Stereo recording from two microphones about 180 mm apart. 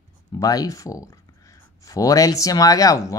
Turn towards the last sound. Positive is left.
turn(degrees=20)  # may be behind; listen again after turning